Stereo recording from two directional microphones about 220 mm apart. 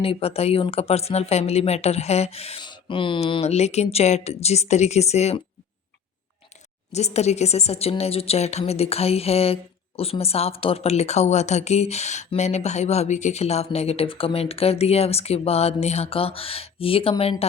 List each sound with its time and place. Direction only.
0.0 s speech: 25° left (ahead or behind)
6.9 s speech: 30° left (ahead or behind)